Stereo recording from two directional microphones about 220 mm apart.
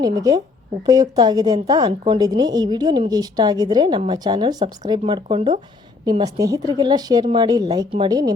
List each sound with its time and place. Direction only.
0.0 s a woman's voice: 15° right (ahead or behind)